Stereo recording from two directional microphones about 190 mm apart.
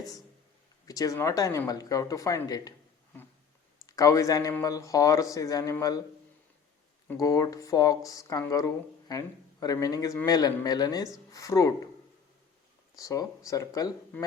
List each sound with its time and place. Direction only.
0.9 s speech: 15° left (ahead or behind)
3.8 s speech: 20° left (ahead or behind)
7.1 s speech: 15° left (ahead or behind)
13.0 s speech: 15° left (ahead or behind)